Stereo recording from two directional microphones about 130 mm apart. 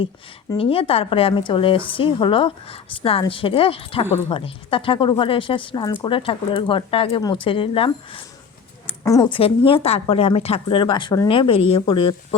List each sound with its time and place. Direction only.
0.5 s a woman's voice: 45° left (ahead or behind)
9.0 s speech: 25° left (ahead or behind)
9.3 s a woman's voice: 45° left (ahead or behind)